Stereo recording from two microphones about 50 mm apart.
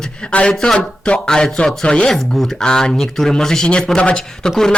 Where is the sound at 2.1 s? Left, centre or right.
Centre.